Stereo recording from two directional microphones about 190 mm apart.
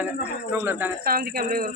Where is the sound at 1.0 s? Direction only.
50° right (ahead or behind).